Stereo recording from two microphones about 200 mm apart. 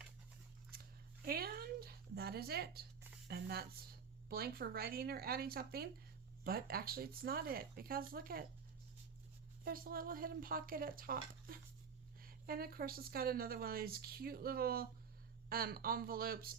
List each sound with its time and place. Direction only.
0.7 s a sound: 50° right (ahead or behind)
3.2 s speech: 55° right (ahead or behind)
9.6 s speech: 45° right (ahead or behind)